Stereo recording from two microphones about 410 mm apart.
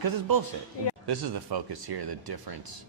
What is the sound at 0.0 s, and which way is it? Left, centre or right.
Speech, right.